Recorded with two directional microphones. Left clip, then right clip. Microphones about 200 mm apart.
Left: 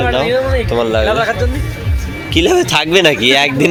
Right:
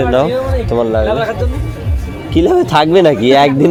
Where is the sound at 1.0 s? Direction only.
5° left (ahead or behind).